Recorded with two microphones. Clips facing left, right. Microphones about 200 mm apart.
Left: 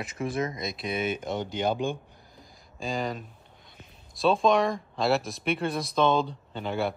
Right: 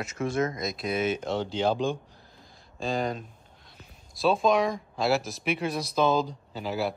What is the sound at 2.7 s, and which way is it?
Speech, centre (ahead or behind).